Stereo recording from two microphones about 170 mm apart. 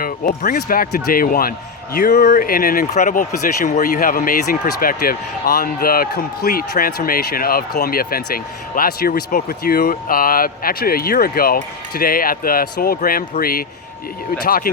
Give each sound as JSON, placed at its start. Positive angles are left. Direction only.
{"t": 0.0, "sound": "speech", "side_deg": 55}
{"t": 2.9, "sound": "speech", "side_deg": 45}